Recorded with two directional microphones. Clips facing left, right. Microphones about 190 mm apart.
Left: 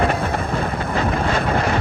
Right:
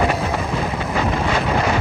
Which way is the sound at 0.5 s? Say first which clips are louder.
Even; 55° left (ahead or behind).